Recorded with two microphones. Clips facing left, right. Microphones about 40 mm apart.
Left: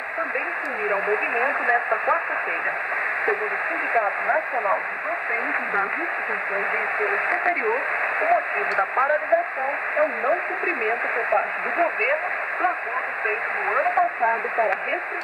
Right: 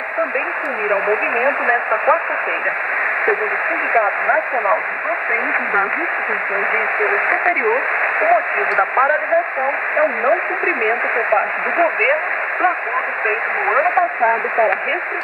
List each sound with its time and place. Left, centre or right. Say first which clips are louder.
0.8 s speech: right 5 dB; right
3.9 s speech: right 6 dB; right
7.0 s speech: right 6 dB; right
10.9 s speech: right 6 dB; right
13.7 s speech: right 5 dB; right